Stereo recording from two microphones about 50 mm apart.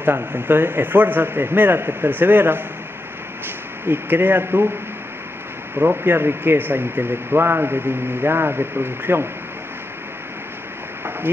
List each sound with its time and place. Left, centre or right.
0.0 s speech: right
3.8 s speech: right
5.8 s speech: right